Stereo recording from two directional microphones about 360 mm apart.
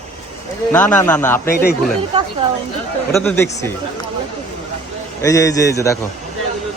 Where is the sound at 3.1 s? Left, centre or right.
Centre.